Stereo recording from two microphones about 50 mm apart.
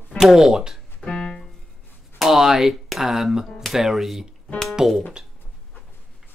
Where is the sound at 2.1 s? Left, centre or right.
Centre.